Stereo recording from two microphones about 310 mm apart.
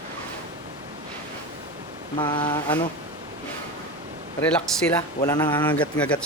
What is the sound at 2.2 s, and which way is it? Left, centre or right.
Speech, centre.